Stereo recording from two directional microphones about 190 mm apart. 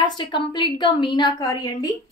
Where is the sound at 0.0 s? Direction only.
25° left (ahead or behind).